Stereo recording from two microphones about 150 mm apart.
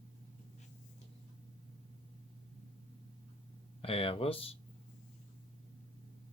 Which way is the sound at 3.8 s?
40° left (ahead or behind).